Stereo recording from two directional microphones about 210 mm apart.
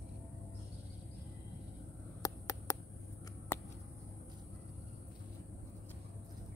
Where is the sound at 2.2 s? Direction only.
15° left (ahead or behind).